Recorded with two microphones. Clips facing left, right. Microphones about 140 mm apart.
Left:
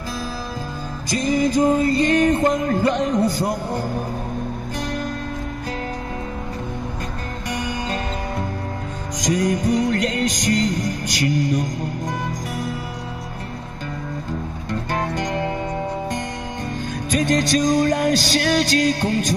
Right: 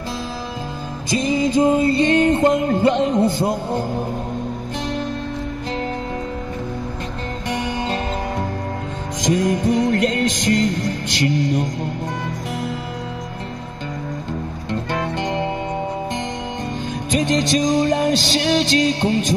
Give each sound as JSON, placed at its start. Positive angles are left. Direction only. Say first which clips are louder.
{"t": 1.1, "sound": "music", "louder": "right 1 dB", "side_deg": -20}
{"t": 7.4, "sound": "music", "louder": "right 3 dB", "side_deg": -25}
{"t": 14.7, "sound": "music", "louder": "right 1 dB", "side_deg": -20}
{"t": 17.1, "sound": "music", "louder": "even", "side_deg": -20}